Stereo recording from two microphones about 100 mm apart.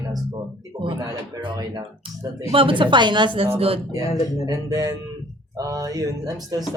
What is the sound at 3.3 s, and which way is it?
Speech, 80° right.